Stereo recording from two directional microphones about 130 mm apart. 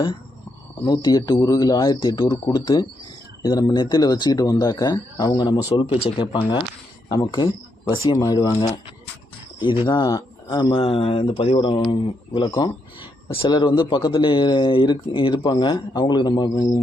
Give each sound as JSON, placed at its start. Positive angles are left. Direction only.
{"t": 0.9, "sound": "speech", "side_deg": 30}
{"t": 9.8, "sound": "speech", "side_deg": 35}